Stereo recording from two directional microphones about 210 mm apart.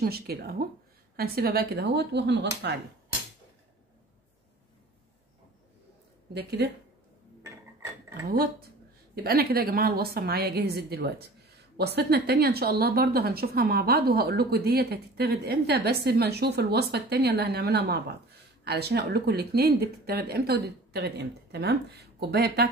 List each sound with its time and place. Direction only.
0.0 s a woman's voice: 45° right (ahead or behind)
6.3 s a woman's voice: 50° right (ahead or behind)
9.1 s a woman's voice: 50° right (ahead or behind)